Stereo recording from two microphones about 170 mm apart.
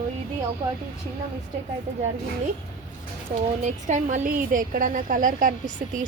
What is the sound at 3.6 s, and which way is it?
A woman's voice, 45° right (ahead or behind).